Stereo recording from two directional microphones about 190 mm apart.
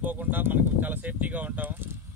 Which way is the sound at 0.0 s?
10° right (ahead or behind).